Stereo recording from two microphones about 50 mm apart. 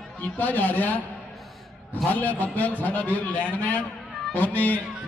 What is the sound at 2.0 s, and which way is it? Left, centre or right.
A man's voice, left.